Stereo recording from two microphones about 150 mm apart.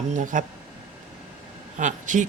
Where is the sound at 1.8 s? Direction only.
55° right (ahead or behind).